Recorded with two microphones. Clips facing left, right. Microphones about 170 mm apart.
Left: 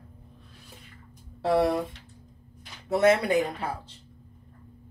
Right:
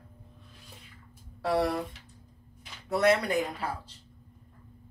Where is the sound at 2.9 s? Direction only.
25° left (ahead or behind).